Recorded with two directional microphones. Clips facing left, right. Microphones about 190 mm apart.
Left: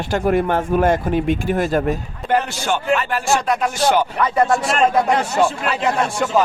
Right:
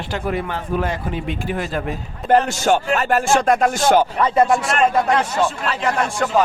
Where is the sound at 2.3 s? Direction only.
40° right (ahead or behind).